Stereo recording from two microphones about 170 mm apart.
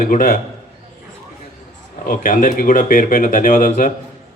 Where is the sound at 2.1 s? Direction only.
55° left (ahead or behind).